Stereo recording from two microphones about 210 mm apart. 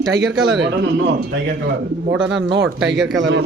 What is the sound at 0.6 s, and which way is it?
Speech, 55° right (ahead or behind).